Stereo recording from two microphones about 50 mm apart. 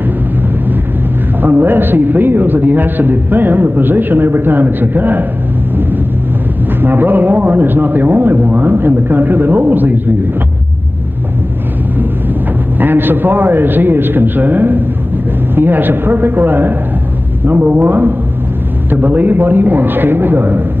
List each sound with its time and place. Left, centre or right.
1.4 s a man's voice: right
6.8 s a man's voice: right
12.7 s a man's voice: right